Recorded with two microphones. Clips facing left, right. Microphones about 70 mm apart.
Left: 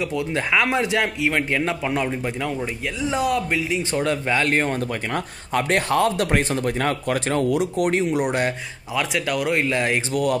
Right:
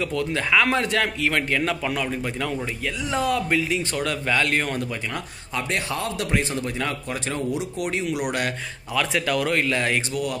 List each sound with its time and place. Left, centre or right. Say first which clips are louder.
0.0 s a man's voice: left 1 dB; centre
3.9 s speech: left 6 dB; left
5.1 s speech: left 6 dB; left
8.9 s a man's voice: even; centre